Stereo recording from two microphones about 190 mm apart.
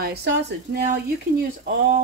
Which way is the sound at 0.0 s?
60° right (ahead or behind).